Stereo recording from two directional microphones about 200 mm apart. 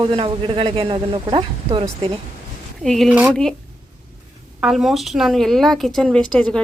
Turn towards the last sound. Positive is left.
turn(degrees=5)  # may be behind; listen again after turning